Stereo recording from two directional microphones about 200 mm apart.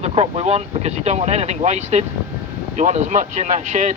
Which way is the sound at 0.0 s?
30° right (ahead or behind).